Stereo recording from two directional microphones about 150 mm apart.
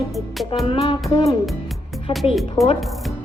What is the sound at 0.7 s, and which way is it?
Music, 35° left (ahead or behind).